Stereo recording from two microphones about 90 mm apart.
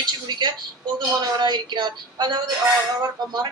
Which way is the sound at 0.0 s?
55° right (ahead or behind).